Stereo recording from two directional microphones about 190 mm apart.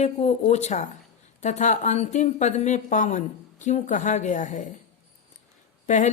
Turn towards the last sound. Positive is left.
turn(degrees=40)  # may be behind; listen again after turning